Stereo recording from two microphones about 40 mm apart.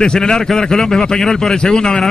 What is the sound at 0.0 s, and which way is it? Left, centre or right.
A man's voice, centre.